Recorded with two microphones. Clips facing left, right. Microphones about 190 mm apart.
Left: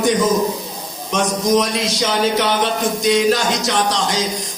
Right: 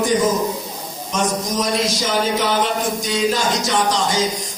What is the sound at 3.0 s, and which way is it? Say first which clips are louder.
Music: left 7 dB; 70° left (ahead or behind).